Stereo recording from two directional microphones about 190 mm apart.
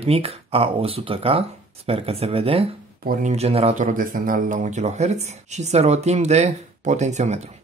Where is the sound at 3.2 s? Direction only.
35° right (ahead or behind).